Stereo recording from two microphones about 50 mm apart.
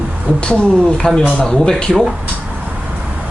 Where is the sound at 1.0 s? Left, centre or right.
Centre.